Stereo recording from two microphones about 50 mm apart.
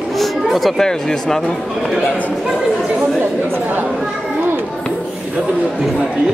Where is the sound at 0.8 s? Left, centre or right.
Centre.